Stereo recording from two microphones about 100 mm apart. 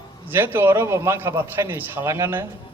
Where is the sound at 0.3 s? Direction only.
20° right (ahead or behind).